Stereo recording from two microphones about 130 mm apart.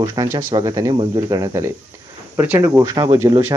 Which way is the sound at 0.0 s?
30° right (ahead or behind).